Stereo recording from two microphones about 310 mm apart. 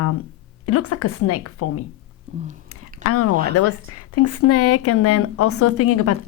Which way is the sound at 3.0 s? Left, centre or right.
Left.